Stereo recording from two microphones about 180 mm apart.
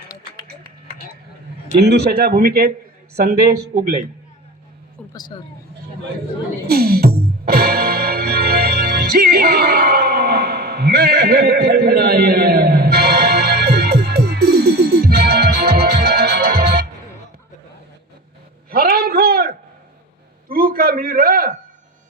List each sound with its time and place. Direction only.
1.8 s speech: 65° right (ahead or behind)
5.1 s speech: 20° left (ahead or behind)
6.7 s music: 60° right (ahead or behind)
18.7 s a man's voice: 55° right (ahead or behind)
20.5 s a man's voice: 55° right (ahead or behind)